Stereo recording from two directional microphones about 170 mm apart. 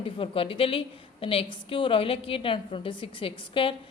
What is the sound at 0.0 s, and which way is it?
A woman's voice, 30° left (ahead or behind).